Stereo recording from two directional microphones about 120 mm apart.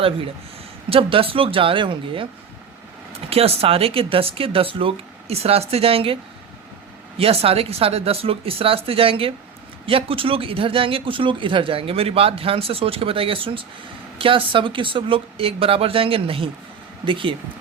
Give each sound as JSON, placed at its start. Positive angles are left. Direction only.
{"t": 0.9, "sound": "speech", "side_deg": -50}
{"t": 3.2, "sound": "speech", "side_deg": -55}
{"t": 7.2, "sound": "speech", "side_deg": -55}